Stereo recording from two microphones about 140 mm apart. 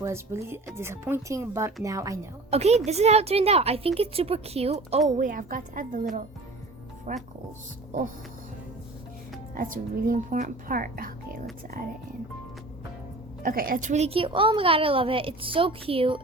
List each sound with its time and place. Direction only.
0.0 s speech: 20° right (ahead or behind)
2.5 s a woman's voice: 50° right (ahead or behind)
5.0 s a woman's voice: 60° right (ahead or behind)
7.1 s speech: 55° right (ahead or behind)
9.6 s speech: 85° right
13.4 s a woman's voice: 90° right; by 16.2 s 40° right (ahead or behind)